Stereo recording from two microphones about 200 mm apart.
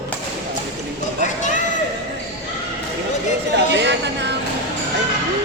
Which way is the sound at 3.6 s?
60° right (ahead or behind).